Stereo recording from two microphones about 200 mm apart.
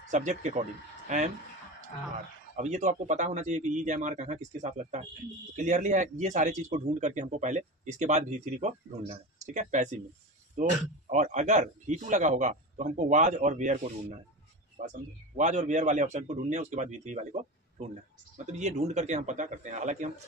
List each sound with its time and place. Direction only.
0.1 s speech: 35° right (ahead or behind)
2.5 s a man's voice: 35° right (ahead or behind)